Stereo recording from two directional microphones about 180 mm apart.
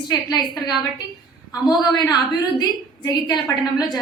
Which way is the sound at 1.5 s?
25° left (ahead or behind).